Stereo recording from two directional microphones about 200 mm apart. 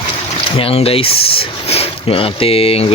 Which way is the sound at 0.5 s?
30° left (ahead or behind).